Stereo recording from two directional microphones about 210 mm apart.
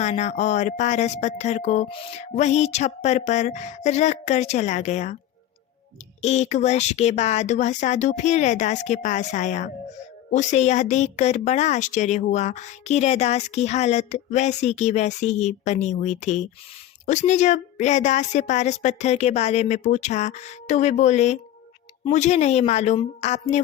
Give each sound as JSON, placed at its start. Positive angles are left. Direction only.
{"t": 0.0, "sound": "speech", "side_deg": 30}
{"t": 6.2, "sound": "speech", "side_deg": 30}